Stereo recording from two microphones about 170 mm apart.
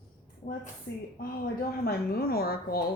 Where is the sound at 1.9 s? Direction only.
65° left (ahead or behind).